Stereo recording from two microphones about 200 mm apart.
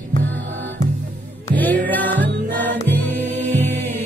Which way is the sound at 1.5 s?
10° left (ahead or behind).